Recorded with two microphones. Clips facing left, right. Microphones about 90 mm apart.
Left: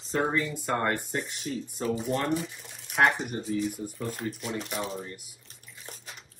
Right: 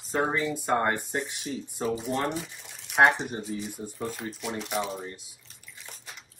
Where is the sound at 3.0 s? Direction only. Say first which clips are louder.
Right 3 dB; 25° right (ahead or behind).